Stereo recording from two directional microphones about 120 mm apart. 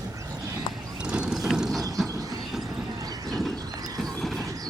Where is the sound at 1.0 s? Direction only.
5° right (ahead or behind).